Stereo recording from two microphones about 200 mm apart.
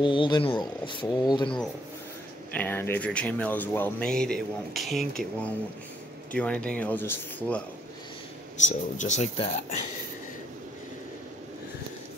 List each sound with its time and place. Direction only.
0.0 s speech: 25° left (ahead or behind)
2.5 s speech: 10° left (ahead or behind)
8.6 s speech: 35° left (ahead or behind)